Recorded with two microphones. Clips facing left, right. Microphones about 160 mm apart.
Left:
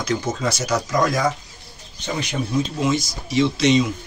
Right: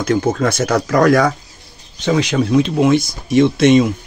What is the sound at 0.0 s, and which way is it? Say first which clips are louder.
Speech: right 7 dB; 55° right (ahead or behind).